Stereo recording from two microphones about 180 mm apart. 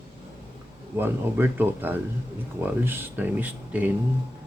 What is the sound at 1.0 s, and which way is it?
Speech, 10° right (ahead or behind).